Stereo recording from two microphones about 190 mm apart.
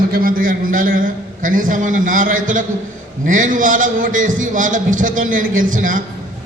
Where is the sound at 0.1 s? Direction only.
50° right (ahead or behind).